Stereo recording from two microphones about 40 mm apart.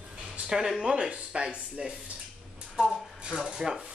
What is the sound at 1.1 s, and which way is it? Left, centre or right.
Speech, right.